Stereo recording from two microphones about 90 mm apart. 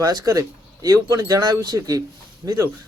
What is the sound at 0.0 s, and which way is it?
Speech, 45° right (ahead or behind).